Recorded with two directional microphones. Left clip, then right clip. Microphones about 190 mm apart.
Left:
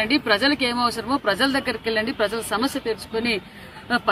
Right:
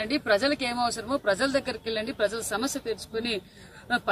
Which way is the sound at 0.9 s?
30° right (ahead or behind).